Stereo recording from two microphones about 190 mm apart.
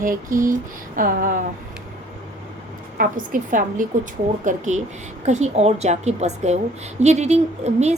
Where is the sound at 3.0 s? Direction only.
45° right (ahead or behind).